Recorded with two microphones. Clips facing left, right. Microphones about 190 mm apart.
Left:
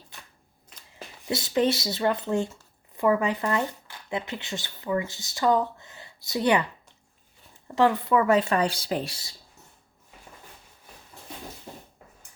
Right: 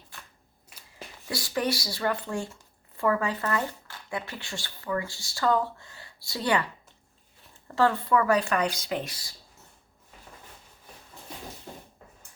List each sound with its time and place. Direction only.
1.3 s speech: 25° left (ahead or behind)
7.8 s speech: 20° left (ahead or behind)